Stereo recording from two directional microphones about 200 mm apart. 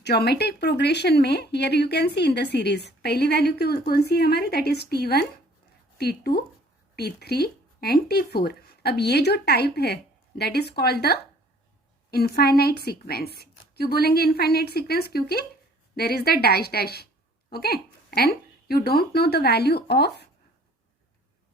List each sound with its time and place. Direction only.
0.0 s speech: 55° left (ahead or behind)